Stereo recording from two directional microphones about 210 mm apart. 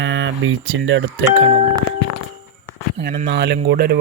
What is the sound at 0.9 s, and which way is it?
Speech, 65° right (ahead or behind).